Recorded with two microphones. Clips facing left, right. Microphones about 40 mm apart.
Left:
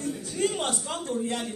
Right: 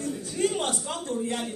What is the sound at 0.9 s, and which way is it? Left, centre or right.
Speech, centre.